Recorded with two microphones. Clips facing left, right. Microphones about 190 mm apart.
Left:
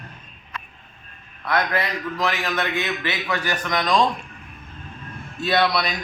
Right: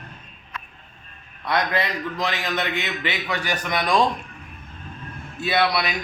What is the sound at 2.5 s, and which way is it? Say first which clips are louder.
A man's voice: left 1 dB; 20° right (ahead or behind).